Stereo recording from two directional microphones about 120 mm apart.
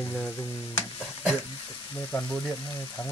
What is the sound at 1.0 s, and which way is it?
Stir, 10° right (ahead or behind).